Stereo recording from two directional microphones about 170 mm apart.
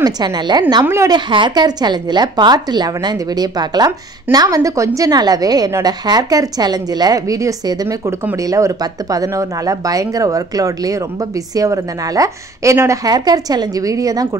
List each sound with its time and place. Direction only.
0.0 s a woman's voice: 25° right (ahead or behind)